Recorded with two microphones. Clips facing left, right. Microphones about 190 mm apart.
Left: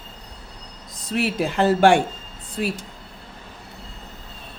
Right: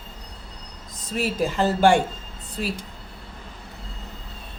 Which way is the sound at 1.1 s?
65° left (ahead or behind).